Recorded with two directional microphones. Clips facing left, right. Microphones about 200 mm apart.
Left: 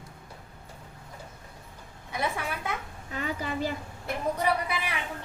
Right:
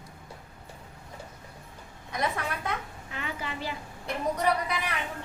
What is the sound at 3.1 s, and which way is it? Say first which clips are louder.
Speech: left 5 dB; 40° left (ahead or behind).